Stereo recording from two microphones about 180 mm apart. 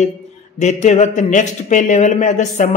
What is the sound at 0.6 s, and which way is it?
Speech, 40° left (ahead or behind).